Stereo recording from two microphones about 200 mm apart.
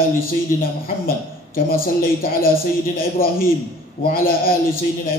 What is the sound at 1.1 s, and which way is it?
A woman's voice, 45° left (ahead or behind).